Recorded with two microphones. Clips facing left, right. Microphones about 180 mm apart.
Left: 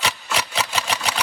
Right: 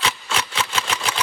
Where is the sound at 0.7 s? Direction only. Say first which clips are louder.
Even; 35° left (ahead or behind).